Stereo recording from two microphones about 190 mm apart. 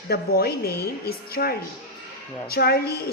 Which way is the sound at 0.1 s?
55° left (ahead or behind).